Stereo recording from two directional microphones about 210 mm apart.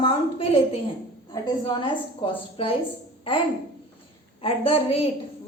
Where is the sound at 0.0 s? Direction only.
25° left (ahead or behind).